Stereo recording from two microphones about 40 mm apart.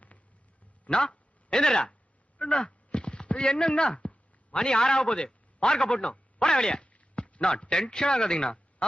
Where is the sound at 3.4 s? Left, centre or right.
Left.